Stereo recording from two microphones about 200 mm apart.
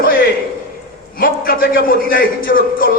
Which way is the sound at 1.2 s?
45° left (ahead or behind).